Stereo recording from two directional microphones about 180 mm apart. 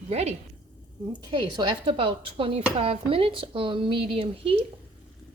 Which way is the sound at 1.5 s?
25° right (ahead or behind).